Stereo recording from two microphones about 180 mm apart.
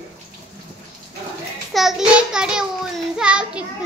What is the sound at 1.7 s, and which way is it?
A child's voice, centre (ahead or behind).